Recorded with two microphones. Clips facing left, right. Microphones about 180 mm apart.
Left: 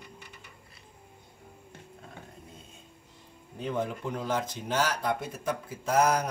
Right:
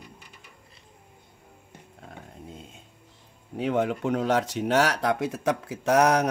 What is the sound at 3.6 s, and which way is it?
Speech, 80° right.